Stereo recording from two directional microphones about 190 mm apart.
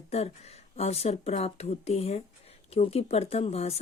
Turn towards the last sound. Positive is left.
turn(degrees=35)  # may be behind; listen again after turning